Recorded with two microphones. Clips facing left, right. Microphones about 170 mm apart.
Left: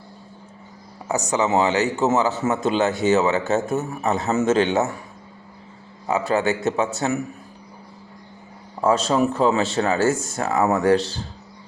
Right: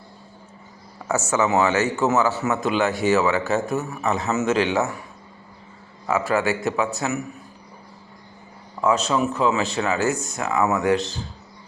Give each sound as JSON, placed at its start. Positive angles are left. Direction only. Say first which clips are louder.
{"t": 1.0, "sound": "a man's voice", "louder": "even", "side_deg": 15}
{"t": 6.1, "sound": "a man's voice", "louder": "left 1 dB", "side_deg": 20}
{"t": 8.8, "sound": "a man's voice", "louder": "left 2 dB", "side_deg": 30}